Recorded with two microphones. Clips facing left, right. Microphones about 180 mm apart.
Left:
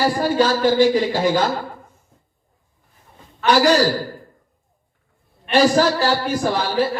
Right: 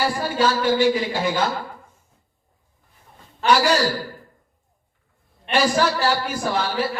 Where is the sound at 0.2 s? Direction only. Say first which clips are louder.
Left 4 dB; 35° left (ahead or behind).